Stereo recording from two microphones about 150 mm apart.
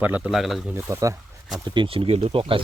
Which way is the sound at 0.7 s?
15° right (ahead or behind).